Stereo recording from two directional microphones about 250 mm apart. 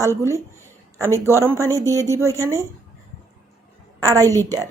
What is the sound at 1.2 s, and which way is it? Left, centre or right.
Speech, centre.